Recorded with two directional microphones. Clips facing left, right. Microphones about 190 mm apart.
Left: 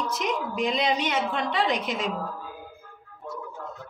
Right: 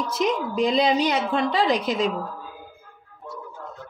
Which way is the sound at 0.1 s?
35° right (ahead or behind).